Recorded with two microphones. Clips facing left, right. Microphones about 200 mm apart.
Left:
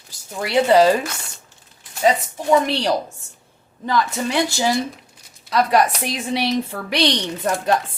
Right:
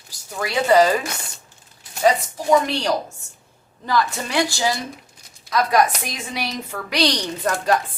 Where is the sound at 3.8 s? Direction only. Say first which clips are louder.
Left 1 dB; 20° left (ahead or behind).